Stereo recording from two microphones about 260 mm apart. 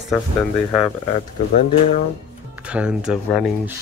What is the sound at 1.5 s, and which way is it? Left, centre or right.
Speech, left.